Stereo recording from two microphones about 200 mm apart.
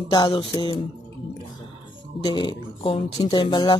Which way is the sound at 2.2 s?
20° left (ahead or behind).